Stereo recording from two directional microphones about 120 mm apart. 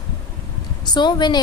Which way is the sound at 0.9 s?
35° left (ahead or behind).